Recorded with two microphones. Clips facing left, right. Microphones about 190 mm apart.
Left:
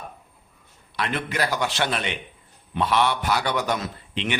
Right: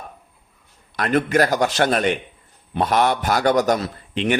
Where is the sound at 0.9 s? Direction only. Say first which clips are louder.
Right 9 dB; 45° right (ahead or behind).